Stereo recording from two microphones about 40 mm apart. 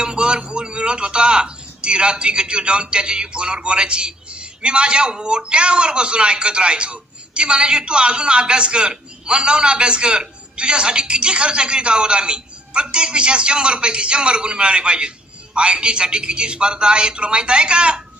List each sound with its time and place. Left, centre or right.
0.0 s speech: right